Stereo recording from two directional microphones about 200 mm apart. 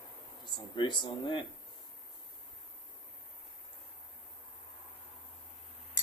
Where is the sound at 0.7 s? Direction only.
20° left (ahead or behind).